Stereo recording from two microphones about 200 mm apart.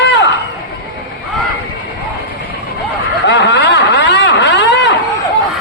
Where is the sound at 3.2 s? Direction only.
60° left (ahead or behind).